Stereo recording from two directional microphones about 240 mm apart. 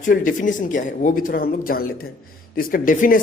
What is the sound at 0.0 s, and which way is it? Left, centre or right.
Speech, left.